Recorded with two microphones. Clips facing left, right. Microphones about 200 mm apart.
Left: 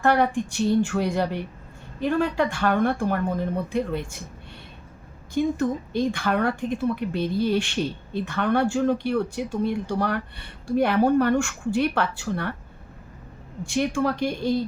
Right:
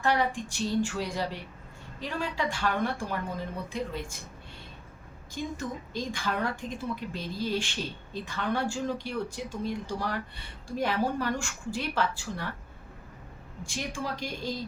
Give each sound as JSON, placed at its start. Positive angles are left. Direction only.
{"t": 0.0, "sound": "a woman's voice", "side_deg": 55}
{"t": 5.3, "sound": "a woman's voice", "side_deg": 60}
{"t": 13.7, "sound": "a woman's voice", "side_deg": 60}